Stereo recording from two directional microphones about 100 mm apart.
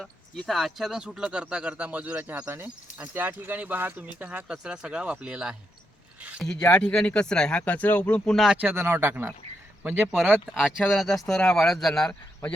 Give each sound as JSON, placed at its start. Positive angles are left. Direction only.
{"t": 0.0, "sound": "speech", "side_deg": 0}
{"t": 6.7, "sound": "speech", "side_deg": 10}
{"t": 8.6, "sound": "speech", "side_deg": -20}
{"t": 10.6, "sound": "speech", "side_deg": 0}